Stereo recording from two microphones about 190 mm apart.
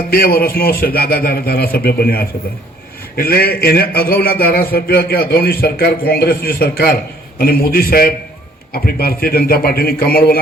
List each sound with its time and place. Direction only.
0.1 s a man's voice: 50° left (ahead or behind)